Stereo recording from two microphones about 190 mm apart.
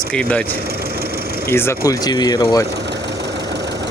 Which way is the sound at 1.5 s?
15° left (ahead or behind).